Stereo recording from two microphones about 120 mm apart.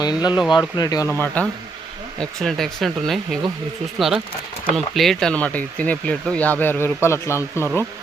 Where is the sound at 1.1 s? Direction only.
15° left (ahead or behind).